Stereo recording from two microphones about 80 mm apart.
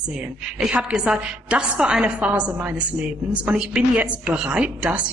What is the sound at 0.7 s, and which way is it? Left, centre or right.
Speech, centre.